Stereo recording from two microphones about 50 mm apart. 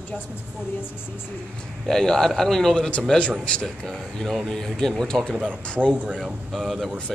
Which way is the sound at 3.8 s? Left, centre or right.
Centre.